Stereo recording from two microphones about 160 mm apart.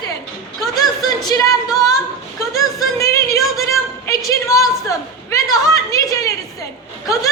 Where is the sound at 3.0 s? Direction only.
20° left (ahead or behind).